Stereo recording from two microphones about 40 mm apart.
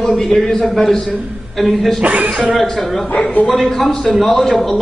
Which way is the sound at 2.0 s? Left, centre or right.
Right.